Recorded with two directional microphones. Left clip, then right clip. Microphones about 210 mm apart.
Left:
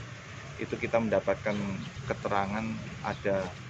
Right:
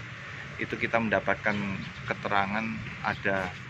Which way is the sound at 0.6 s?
5° left (ahead or behind).